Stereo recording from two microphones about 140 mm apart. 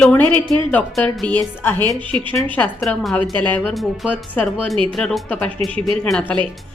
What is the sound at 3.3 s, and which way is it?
Speech, 10° left (ahead or behind).